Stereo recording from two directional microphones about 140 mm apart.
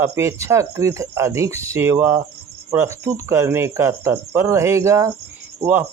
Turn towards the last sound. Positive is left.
turn(degrees=-15)  # may be behind; listen again after turning